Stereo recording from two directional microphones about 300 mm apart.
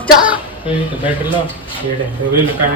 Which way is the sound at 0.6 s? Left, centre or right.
Centre.